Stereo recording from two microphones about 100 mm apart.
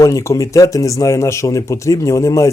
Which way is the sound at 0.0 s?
35° left (ahead or behind).